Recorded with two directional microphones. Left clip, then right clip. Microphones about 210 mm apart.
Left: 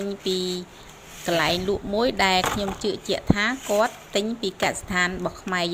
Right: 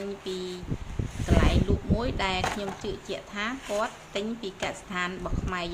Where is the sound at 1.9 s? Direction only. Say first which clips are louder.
Left 10 dB; 25° left (ahead or behind).